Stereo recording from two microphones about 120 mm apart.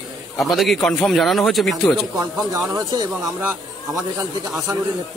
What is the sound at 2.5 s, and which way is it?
Speech, 30° right (ahead or behind).